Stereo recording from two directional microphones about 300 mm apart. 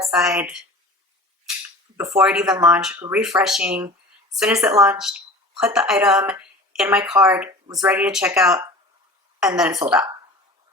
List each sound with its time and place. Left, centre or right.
0.1 s speech: centre
2.0 s speech: centre